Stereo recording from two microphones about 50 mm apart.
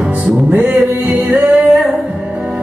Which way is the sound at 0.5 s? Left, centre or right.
Right.